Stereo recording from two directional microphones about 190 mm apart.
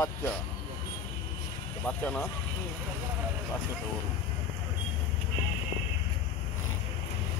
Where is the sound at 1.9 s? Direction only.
5° left (ahead or behind).